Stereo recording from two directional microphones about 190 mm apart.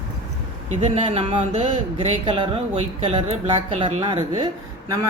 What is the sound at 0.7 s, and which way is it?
Speech, 35° right (ahead or behind).